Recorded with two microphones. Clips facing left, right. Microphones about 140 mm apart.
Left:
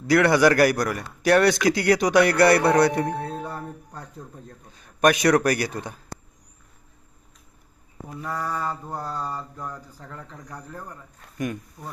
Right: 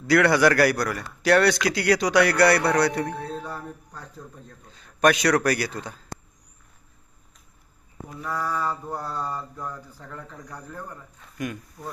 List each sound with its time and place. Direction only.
0.1 s a man's voice: 20° left (ahead or behind)
8.2 s a man's voice: 20° left (ahead or behind)
8.9 s mantra: 15° left (ahead or behind)